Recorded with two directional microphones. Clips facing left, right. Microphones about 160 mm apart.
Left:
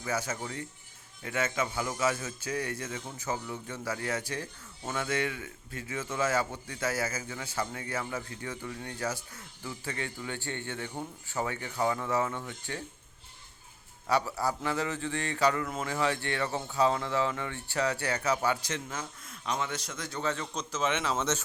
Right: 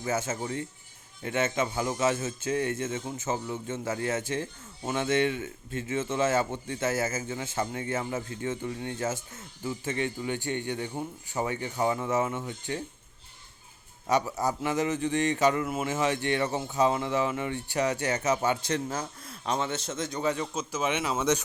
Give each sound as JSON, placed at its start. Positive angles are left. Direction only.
{"t": 0.0, "sound": "a man's voice", "side_deg": -25}
{"t": 14.1, "sound": "a man's voice", "side_deg": -20}